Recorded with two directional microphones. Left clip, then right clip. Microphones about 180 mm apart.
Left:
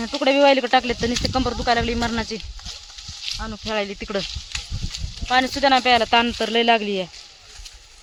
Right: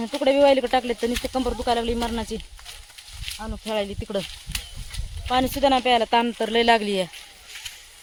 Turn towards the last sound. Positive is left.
turn(degrees=0)  # may be behind; listen again after turning